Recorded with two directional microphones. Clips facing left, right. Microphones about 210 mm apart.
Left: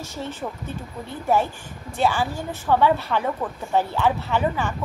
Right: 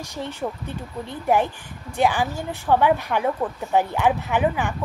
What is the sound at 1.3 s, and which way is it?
A woman's voice, 15° right (ahead or behind).